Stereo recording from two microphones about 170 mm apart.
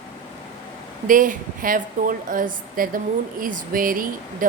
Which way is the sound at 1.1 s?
50° right (ahead or behind).